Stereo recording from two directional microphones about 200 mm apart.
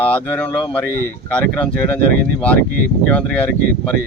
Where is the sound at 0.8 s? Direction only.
45° right (ahead or behind).